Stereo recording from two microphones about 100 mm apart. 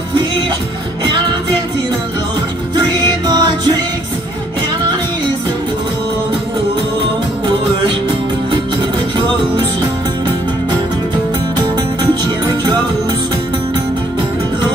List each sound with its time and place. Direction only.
2.7 s music: 45° right (ahead or behind)
11.5 s music: 45° right (ahead or behind)